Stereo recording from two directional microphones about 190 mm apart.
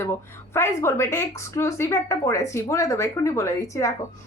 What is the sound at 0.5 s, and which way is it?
A woman's voice, 15° left (ahead or behind).